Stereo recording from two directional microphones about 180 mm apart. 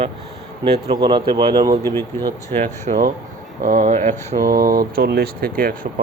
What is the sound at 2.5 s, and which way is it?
Speech, 40° right (ahead or behind).